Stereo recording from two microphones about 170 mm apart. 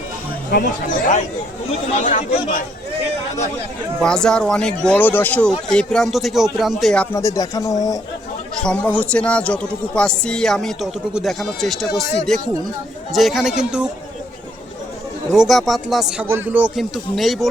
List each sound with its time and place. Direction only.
0.5 s speech: 55° left (ahead or behind)
4.0 s a man's voice: 5° left (ahead or behind)
7.2 s speech: 20° left (ahead or behind)
8.5 s a man's voice: 5° left (ahead or behind)
15.3 s a man's voice: centre (ahead or behind)
16.7 s a man's voice: centre (ahead or behind)